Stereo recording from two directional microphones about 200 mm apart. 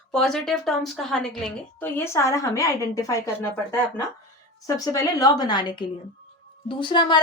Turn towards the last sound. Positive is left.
turn(degrees=25)  # may be behind; listen again after turning